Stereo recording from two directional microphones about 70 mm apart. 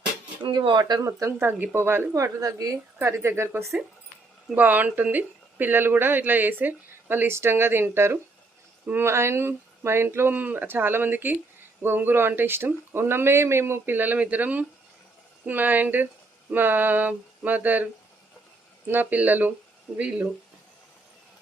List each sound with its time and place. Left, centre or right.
0.5 s speech: right
1.0 s speech: right
1.5 s speech: right
3.0 s speech: right
4.5 s speech: right
18.9 s speech: right